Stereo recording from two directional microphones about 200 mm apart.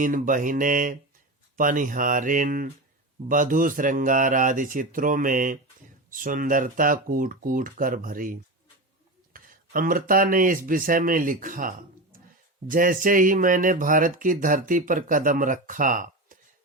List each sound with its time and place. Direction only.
0.0 s speech: 40° right (ahead or behind)